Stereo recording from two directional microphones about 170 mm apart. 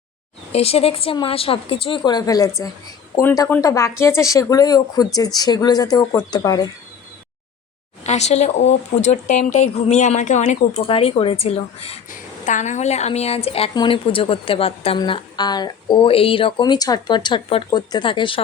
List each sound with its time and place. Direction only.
0.5 s a woman's voice: 35° left (ahead or behind)
8.0 s speech: 40° left (ahead or behind)
10.8 s a woman's voice: 30° left (ahead or behind)
12.1 s a woman's voice: 45° left (ahead or behind); by 18.3 s 30° left (ahead or behind)